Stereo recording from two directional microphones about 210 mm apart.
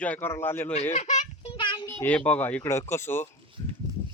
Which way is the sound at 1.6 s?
20° left (ahead or behind).